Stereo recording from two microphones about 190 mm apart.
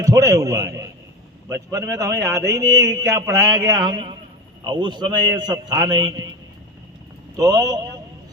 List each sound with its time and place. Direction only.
0.0 s a man's voice: 15° right (ahead or behind)
7.3 s a man's voice: 20° right (ahead or behind)